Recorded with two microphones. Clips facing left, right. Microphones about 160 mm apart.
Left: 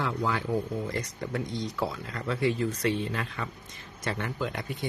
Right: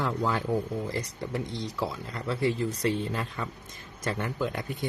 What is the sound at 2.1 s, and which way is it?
Speech, 30° right (ahead or behind).